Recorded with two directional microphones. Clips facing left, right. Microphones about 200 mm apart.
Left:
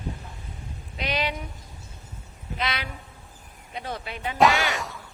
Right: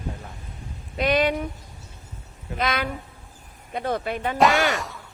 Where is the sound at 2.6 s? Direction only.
45° right (ahead or behind).